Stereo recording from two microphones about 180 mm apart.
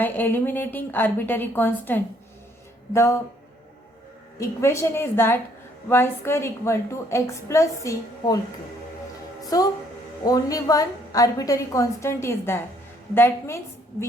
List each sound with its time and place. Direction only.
0.0 s a woman's voice: 10° left (ahead or behind)
4.4 s a woman's voice: 15° left (ahead or behind)
9.5 s a woman's voice: 20° left (ahead or behind)